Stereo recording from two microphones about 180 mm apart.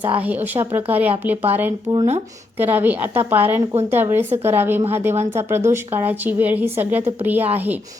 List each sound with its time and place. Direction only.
0.2 s a woman's voice: 10° right (ahead or behind)
1.9 s speech: 30° right (ahead or behind)
2.6 s a woman's voice: 10° right (ahead or behind)